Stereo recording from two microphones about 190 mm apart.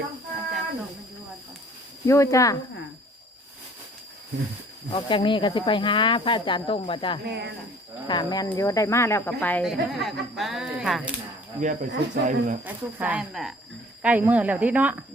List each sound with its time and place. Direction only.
2.0 s speech: 15° left (ahead or behind)
4.9 s speech: 25° left (ahead or behind)
7.3 s speech: 60° right (ahead or behind)
8.0 s speech: 25° left (ahead or behind); by 11.1 s 5° right (ahead or behind)
11.6 s speech: 45° right (ahead or behind)
11.9 s speech: 60° right (ahead or behind)
12.2 s speech: 40° right (ahead or behind)
12.6 s speech: 10° right (ahead or behind)